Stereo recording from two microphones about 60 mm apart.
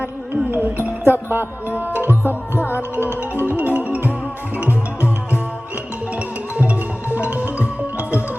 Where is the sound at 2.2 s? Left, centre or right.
Left.